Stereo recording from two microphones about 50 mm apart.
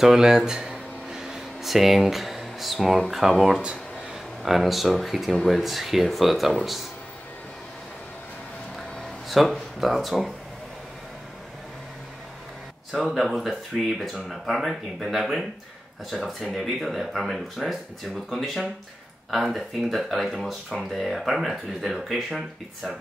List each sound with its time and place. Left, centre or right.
0.0 s speech: centre
0.5 s a sound: centre
3.1 s speech: centre
3.6 s a sound: centre
4.4 s speech: centre
9.3 s speech: centre
12.9 s speech: centre